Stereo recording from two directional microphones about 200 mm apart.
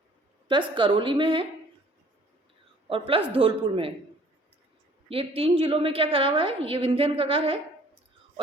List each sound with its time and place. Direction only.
0.8 s a woman's voice: 25° right (ahead or behind)
3.1 s a woman's voice: 30° right (ahead or behind)
5.0 s a woman's voice: 30° right (ahead or behind)